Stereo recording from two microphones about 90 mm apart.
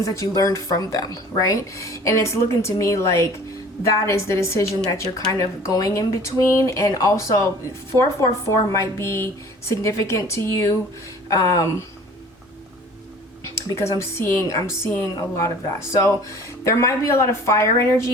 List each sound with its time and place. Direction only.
0.0 s speech: 40° left (ahead or behind)
13.6 s a woman's voice: 30° left (ahead or behind)